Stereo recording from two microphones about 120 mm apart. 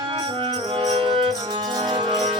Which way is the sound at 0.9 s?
45° right (ahead or behind).